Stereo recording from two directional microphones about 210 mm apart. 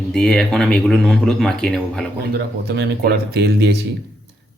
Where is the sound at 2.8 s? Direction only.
50° right (ahead or behind).